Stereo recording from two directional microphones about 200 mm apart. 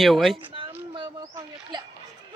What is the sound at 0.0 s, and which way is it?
Speech, centre (ahead or behind).